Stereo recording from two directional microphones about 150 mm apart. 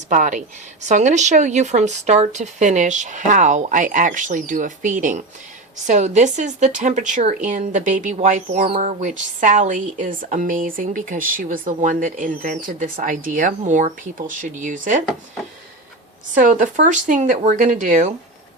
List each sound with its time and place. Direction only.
0.1 s a woman's voice: 55° right (ahead or behind)
16.3 s a woman's voice: 60° right (ahead or behind)